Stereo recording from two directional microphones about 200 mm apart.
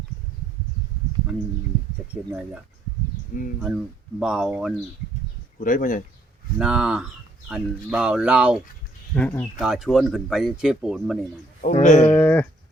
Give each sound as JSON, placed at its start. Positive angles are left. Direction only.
{"t": 3.3, "sound": "speech", "side_deg": 45}
{"t": 4.2, "sound": "speech", "side_deg": 0}
{"t": 5.5, "sound": "speech", "side_deg": 40}
{"t": 6.6, "sound": "speech", "side_deg": -5}
{"t": 9.1, "sound": "a sound", "side_deg": 10}
{"t": 9.6, "sound": "speech", "side_deg": 0}
{"t": 11.6, "sound": "speech", "side_deg": 40}
{"t": 12.0, "sound": "a sound", "side_deg": 10}